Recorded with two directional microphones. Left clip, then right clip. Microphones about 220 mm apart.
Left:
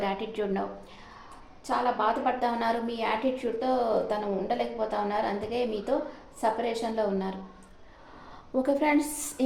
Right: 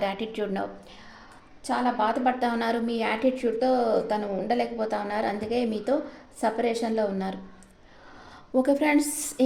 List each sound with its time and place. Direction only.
0.0 s a woman's voice: 55° right (ahead or behind)
1.6 s a woman's voice: 55° right (ahead or behind)
8.6 s a woman's voice: 50° right (ahead or behind)